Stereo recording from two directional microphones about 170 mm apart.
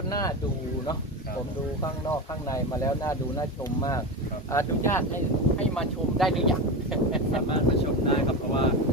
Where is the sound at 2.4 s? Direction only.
20° left (ahead or behind).